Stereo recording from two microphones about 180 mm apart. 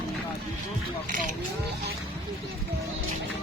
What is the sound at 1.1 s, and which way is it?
Vehicle, 50° right (ahead or behind).